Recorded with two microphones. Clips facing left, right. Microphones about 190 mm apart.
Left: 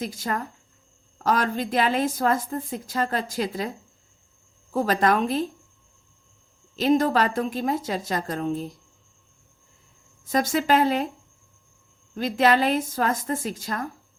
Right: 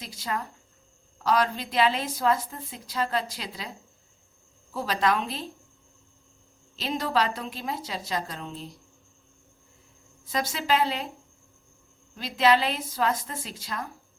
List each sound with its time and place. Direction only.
0.0 s a woman's voice: 50° left (ahead or behind)
4.7 s a woman's voice: 50° left (ahead or behind)
6.7 s a woman's voice: 50° left (ahead or behind)
10.2 s a woman's voice: 50° left (ahead or behind)
12.1 s a woman's voice: 50° left (ahead or behind)